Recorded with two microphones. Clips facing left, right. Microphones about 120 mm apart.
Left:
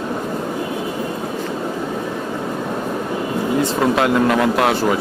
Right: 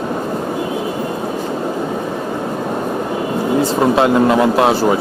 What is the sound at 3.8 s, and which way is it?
Speech, 25° right (ahead or behind).